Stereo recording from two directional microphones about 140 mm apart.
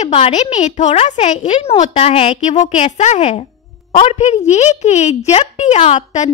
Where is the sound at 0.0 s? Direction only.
50° left (ahead or behind).